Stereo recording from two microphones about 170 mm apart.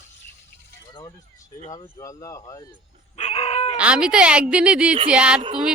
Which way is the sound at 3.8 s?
5° right (ahead or behind).